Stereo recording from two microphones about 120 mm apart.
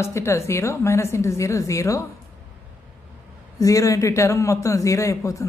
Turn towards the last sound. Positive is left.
turn(degrees=25)  # may be behind; listen again after turning